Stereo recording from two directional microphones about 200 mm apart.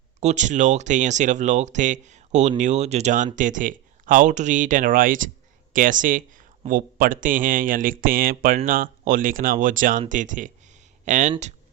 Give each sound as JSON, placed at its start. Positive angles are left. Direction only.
{"t": 0.2, "sound": "speech", "side_deg": -35}